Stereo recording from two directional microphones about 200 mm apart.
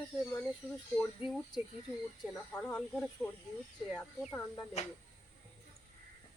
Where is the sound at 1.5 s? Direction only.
20° left (ahead or behind).